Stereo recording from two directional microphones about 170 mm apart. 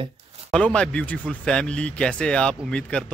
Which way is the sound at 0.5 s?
5° left (ahead or behind).